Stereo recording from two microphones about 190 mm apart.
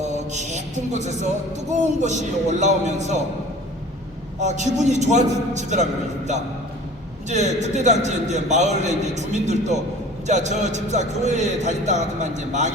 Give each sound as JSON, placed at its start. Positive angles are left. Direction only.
{"t": 0.0, "sound": "music", "side_deg": -40}
{"t": 1.7, "sound": "a man's voice", "side_deg": -40}
{"t": 4.4, "sound": "a man's voice", "side_deg": -40}